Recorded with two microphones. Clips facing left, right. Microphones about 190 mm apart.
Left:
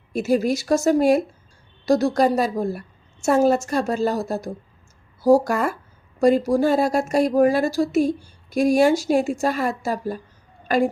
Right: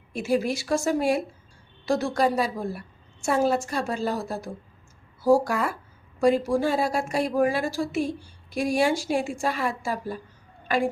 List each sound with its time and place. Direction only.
0.1 s a woman's voice: 40° left (ahead or behind)